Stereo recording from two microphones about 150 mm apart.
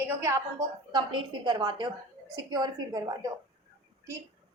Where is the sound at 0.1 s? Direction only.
15° right (ahead or behind).